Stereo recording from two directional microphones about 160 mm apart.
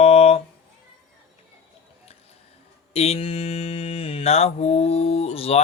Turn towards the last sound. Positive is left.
turn(degrees=40)  # may be behind; listen again after turning